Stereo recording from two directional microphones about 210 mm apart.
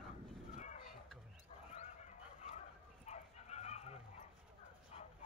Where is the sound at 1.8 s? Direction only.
35° left (ahead or behind).